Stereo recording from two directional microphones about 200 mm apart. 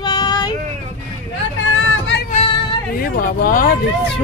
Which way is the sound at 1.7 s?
70° left (ahead or behind).